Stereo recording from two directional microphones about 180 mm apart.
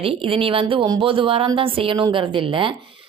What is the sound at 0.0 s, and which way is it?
A woman's voice, 30° right (ahead or behind).